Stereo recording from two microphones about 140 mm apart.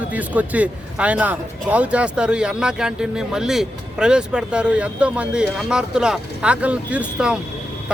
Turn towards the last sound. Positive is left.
turn(degrees=-10)  # may be behind; listen again after turning